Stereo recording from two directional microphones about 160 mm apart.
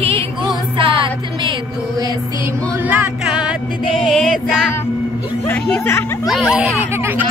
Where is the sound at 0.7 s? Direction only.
30° right (ahead or behind).